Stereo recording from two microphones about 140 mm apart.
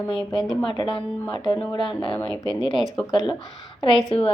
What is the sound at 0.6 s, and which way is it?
Speech, 35° left (ahead or behind).